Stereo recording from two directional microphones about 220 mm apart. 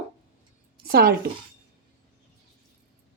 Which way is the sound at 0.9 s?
45° right (ahead or behind).